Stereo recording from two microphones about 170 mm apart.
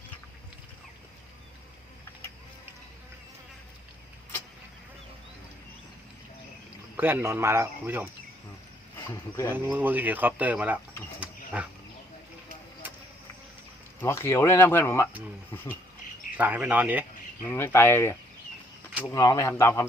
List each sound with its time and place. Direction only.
6.9 s speech: 10° right (ahead or behind)
9.5 s speech: 10° right (ahead or behind)
14.0 s speech: 15° left (ahead or behind)
16.4 s speech: 10° right (ahead or behind)
17.5 s speech: 15° left (ahead or behind)